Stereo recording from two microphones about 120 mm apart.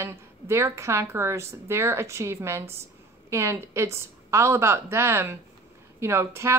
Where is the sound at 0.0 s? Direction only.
20° right (ahead or behind).